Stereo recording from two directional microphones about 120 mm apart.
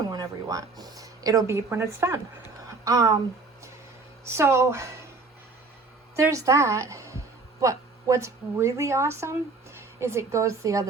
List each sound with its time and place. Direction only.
0.1 s speech: 30° right (ahead or behind)
4.3 s a woman's voice: 20° right (ahead or behind)
6.1 s a woman's voice: 25° right (ahead or behind)